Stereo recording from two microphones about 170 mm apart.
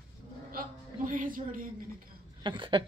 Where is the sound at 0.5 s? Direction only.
55° right (ahead or behind).